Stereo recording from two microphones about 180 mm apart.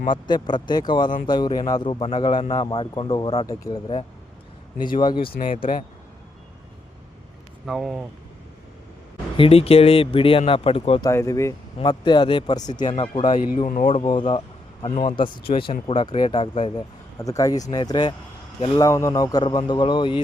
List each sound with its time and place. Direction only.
0.1 s a man's voice: 25° left (ahead or behind)
3.4 s a man's voice: 20° left (ahead or behind)
4.8 s a man's voice: 25° left (ahead or behind)
7.7 s speech: centre (ahead or behind)
9.4 s speech: 35° left (ahead or behind)
11.0 s a man's voice: 15° left (ahead or behind)
13.6 s speech: 45° left (ahead or behind)
14.0 s a man's voice: 25° left (ahead or behind)
17.2 s a man's voice: 20° left (ahead or behind)